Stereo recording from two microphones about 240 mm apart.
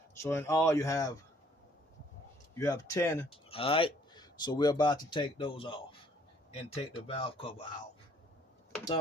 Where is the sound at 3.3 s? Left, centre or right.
Left.